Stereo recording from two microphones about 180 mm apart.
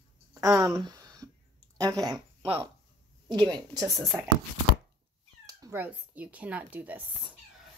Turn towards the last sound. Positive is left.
turn(degrees=-10)  # may be behind; listen again after turning